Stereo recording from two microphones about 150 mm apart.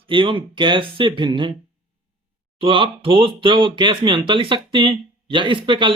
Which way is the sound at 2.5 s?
35° right (ahead or behind).